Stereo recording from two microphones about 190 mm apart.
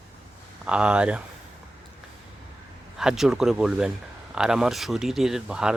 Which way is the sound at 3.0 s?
Centre (ahead or behind).